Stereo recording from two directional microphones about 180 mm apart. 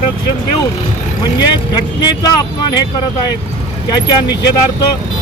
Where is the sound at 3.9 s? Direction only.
20° left (ahead or behind).